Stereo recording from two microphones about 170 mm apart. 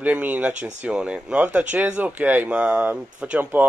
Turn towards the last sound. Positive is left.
turn(degrees=-10)  # may be behind; listen again after turning